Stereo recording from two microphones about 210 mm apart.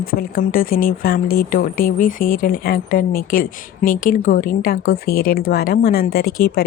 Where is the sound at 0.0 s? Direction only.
45° left (ahead or behind).